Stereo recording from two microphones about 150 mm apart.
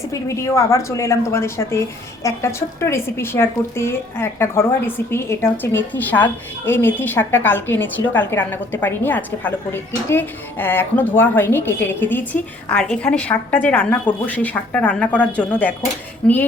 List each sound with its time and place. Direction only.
0.1 s a woman's voice: 20° left (ahead or behind)